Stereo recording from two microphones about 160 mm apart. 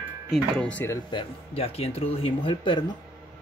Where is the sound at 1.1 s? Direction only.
35° left (ahead or behind).